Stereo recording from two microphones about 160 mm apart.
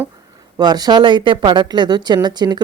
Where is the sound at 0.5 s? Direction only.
25° right (ahead or behind).